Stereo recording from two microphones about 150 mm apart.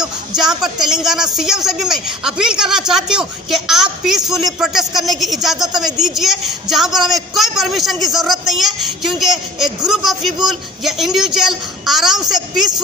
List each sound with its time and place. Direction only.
0.4 s a man's voice: 5° right (ahead or behind)